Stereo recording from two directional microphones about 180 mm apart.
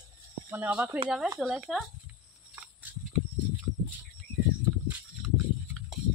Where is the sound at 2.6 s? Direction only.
5° right (ahead or behind).